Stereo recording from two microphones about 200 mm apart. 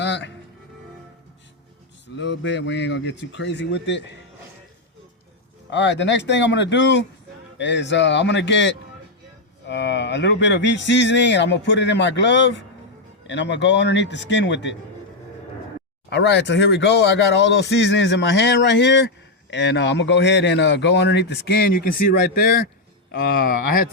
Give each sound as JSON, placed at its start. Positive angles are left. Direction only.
{"t": 0.0, "sound": "music", "side_deg": 60}
{"t": 2.1, "sound": "speech", "side_deg": 65}
{"t": 5.7, "sound": "speech", "side_deg": 60}
{"t": 16.0, "sound": "speech", "side_deg": 60}